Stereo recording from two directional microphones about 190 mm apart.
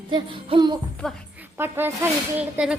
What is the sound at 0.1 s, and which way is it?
Music, 25° right (ahead or behind).